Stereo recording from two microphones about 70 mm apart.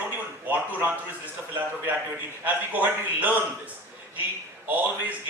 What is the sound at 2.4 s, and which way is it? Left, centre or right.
Speech, right.